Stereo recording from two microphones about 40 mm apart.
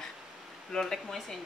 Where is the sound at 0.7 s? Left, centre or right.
Centre.